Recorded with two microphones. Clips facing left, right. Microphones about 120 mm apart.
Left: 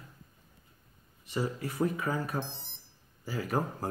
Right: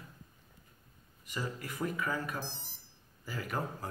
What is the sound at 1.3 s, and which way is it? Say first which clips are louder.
Speech: left 6 dB; 30° left (ahead or behind).